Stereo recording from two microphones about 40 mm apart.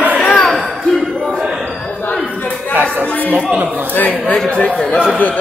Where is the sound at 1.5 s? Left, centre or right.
Centre.